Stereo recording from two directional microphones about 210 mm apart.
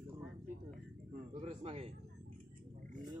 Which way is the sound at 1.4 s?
30° right (ahead or behind).